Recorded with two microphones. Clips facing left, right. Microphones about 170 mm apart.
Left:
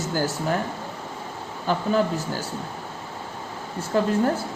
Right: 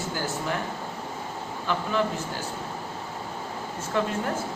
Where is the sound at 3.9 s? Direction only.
35° left (ahead or behind).